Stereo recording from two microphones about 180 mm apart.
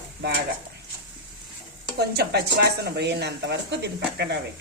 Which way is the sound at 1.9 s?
65° right (ahead or behind).